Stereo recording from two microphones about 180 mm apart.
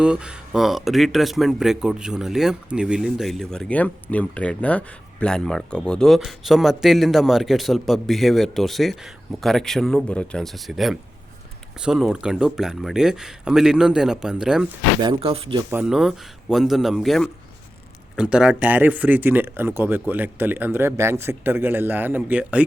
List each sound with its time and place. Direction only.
0.0 s speech: 5° right (ahead or behind)
15.0 s speech: 30° right (ahead or behind)
15.7 s speech: 5° right (ahead or behind)